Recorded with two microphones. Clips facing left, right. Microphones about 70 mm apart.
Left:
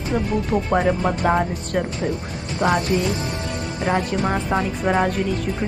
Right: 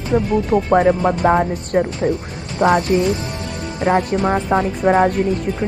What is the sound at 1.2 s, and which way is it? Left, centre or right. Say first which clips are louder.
Speech: right 4 dB; right.